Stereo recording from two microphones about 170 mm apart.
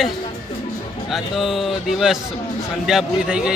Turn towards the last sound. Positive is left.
turn(degrees=-5)  # may be behind; listen again after turning